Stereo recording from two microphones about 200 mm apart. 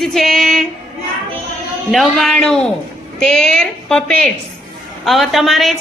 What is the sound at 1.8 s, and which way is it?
A woman's voice, centre (ahead or behind).